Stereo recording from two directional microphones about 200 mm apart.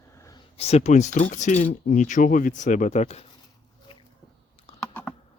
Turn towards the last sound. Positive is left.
turn(degrees=5)  # may be behind; listen again after turning